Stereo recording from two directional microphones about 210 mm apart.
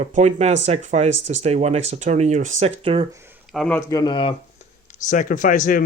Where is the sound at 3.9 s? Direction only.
20° left (ahead or behind).